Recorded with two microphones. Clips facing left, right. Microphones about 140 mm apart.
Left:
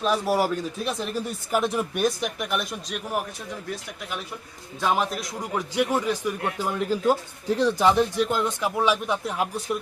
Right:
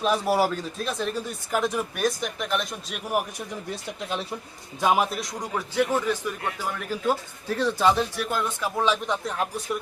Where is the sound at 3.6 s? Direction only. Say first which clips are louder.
Right 4 dB; 25° right (ahead or behind).